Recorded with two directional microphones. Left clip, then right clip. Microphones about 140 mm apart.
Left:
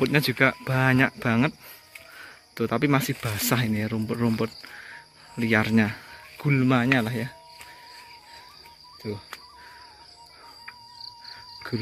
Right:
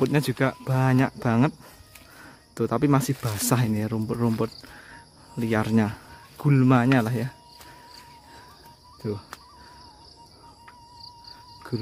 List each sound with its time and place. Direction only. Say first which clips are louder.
0.0 s speech: left 3 dB; 30° right (ahead or behind)
2.5 s speech: right 1 dB; 40° right (ahead or behind)
6.3 s speech: right 2 dB; 50° right (ahead or behind)